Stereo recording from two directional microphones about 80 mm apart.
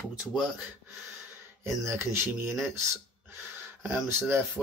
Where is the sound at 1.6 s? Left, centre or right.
Right.